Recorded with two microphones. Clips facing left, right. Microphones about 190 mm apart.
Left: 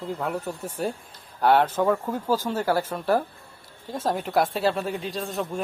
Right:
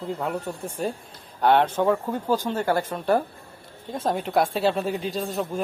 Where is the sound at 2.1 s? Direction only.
5° left (ahead or behind).